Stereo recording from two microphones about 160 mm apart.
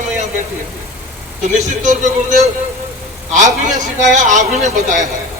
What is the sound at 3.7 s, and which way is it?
A man's voice, 50° right (ahead or behind).